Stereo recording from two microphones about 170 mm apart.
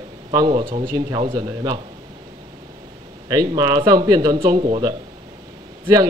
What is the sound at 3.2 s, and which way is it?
A man's voice, 25° right (ahead or behind).